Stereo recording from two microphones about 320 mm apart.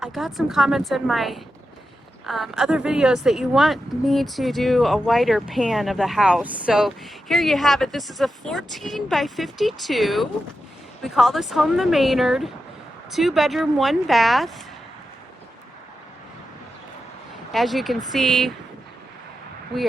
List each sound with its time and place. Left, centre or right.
0.0 s speech: centre
17.5 s speech: centre